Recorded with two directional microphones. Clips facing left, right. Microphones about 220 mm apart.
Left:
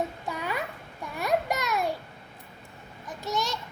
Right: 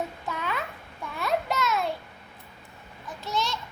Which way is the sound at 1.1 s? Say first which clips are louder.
Left 1 dB; 15° left (ahead or behind).